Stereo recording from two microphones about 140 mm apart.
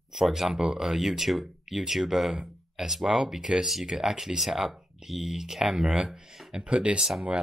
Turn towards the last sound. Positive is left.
turn(degrees=-5)  # may be behind; listen again after turning